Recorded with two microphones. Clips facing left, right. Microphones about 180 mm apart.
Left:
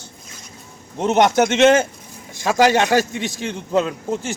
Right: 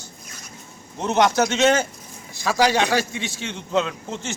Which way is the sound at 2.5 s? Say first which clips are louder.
Left 4 dB; 50° left (ahead or behind).